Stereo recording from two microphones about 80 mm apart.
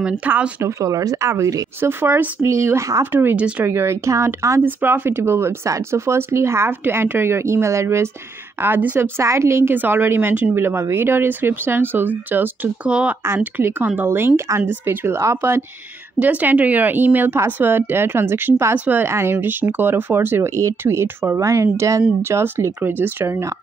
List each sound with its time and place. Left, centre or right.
0.0 s speech: centre
0.6 s speech: right
1.8 s speech: right
3.3 s speech: centre
3.6 s speech: right
8.6 s speech: right
9.2 s speech: right; by 13.1 s centre
13.2 s speech: right
16.2 s speech: centre